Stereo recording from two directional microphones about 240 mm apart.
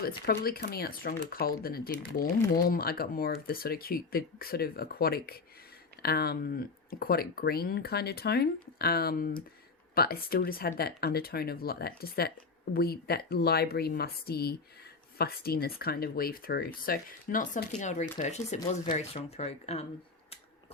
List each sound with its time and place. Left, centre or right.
0.0 s speech: left